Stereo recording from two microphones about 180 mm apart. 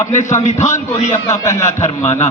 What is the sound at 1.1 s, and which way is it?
Speech, 15° left (ahead or behind).